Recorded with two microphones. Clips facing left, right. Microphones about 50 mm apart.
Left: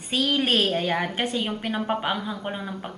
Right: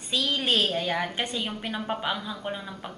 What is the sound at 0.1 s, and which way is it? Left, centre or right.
Speech, left.